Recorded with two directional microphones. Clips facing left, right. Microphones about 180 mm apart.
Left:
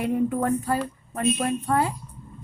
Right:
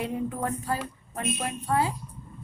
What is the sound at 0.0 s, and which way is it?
A woman's voice, 55° left (ahead or behind).